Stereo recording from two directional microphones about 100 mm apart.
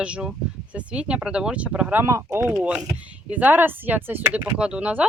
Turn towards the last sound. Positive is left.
turn(degrees=-15)  # may be behind; listen again after turning